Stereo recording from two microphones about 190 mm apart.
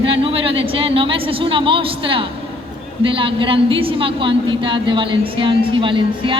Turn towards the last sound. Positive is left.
turn(degrees=-25)  # may be behind; listen again after turning